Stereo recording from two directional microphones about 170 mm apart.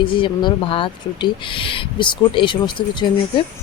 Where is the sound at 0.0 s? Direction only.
30° left (ahead or behind).